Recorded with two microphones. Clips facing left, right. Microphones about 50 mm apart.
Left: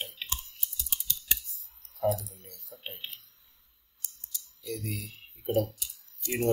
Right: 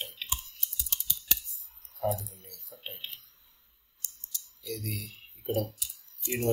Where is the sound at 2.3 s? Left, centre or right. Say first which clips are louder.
Left 1 dB; centre.